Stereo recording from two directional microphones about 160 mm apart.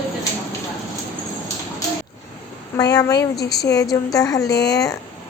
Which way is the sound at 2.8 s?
25° left (ahead or behind).